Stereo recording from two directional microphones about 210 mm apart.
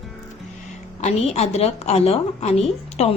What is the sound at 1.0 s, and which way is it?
A woman's voice, 30° left (ahead or behind).